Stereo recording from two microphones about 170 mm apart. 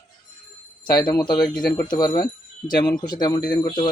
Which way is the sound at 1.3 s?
25° left (ahead or behind).